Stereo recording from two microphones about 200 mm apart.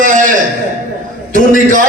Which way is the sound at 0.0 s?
40° right (ahead or behind).